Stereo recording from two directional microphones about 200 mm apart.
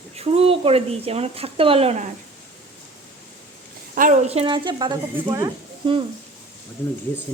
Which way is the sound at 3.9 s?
40° right (ahead or behind).